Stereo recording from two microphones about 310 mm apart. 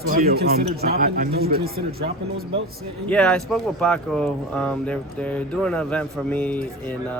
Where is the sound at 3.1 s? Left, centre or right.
Centre.